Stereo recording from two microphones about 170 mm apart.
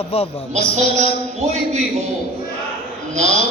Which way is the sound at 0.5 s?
40° right (ahead or behind).